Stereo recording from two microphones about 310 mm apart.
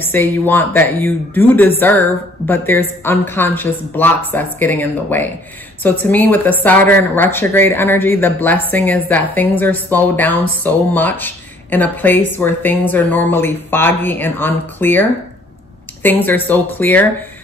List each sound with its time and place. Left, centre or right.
0.0 s speech: centre